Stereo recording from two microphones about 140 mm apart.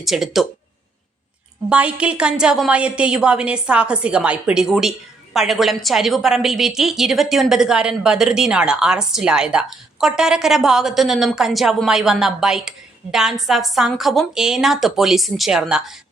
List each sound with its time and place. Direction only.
0.0 s a woman's voice: centre (ahead or behind)
1.7 s a woman's voice: 10° right (ahead or behind)